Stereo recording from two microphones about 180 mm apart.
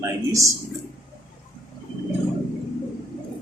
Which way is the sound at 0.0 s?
20° right (ahead or behind).